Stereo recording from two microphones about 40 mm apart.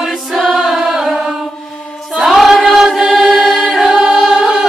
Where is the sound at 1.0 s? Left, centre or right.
Centre.